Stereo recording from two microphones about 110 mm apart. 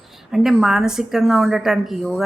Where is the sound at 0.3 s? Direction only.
5° right (ahead or behind).